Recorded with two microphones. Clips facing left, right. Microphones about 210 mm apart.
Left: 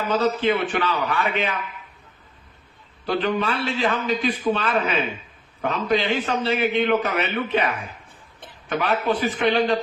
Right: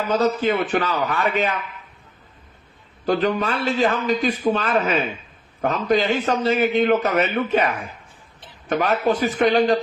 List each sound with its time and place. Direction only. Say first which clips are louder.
0.1 s a man's voice: right 1 dB; 40° right (ahead or behind)
3.1 s a man's voice: right 2 dB; 40° right (ahead or behind)
8.7 s a man's voice: right 3 dB; 40° right (ahead or behind)